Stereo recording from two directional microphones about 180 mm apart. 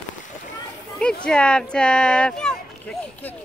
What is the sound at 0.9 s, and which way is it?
Speech, 5° left (ahead or behind).